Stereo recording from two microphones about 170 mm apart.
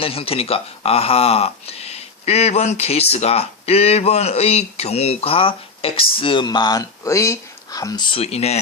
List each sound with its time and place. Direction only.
0.0 s speech: 35° left (ahead or behind)